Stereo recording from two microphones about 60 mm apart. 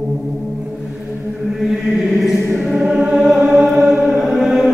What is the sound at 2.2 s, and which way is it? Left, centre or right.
Choir, centre.